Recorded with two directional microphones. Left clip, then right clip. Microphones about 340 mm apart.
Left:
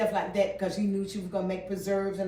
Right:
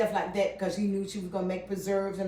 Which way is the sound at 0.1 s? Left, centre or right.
Centre.